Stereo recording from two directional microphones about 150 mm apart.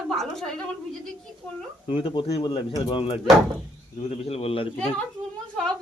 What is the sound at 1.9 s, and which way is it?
Speech, 35° left (ahead or behind).